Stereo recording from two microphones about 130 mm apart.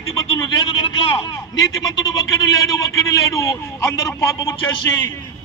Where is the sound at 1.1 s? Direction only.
30° left (ahead or behind).